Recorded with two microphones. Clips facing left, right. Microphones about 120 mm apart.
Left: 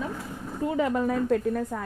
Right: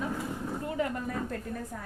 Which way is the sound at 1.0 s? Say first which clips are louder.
Left 10 dB; 85° left.